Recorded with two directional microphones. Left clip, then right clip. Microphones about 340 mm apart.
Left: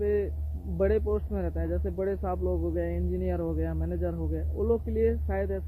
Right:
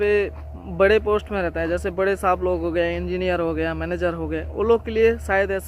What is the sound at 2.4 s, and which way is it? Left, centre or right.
Music, centre.